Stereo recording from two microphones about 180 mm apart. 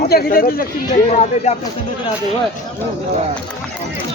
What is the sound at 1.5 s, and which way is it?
Speech, 40° left (ahead or behind).